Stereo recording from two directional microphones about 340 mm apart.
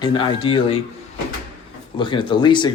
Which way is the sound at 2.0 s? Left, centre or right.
Centre.